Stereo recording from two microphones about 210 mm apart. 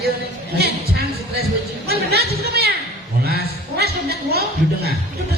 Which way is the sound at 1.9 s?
50° right (ahead or behind).